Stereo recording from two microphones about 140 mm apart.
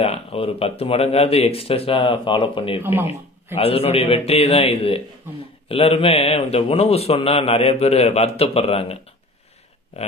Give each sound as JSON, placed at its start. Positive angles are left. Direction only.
{"t": 0.0, "sound": "a man's voice", "side_deg": 45}
{"t": 2.8, "sound": "speech", "side_deg": -15}
{"t": 3.5, "sound": "a man's voice", "side_deg": 45}